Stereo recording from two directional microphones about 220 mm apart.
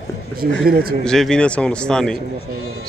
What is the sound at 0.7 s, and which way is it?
Speech, 45° right (ahead or behind).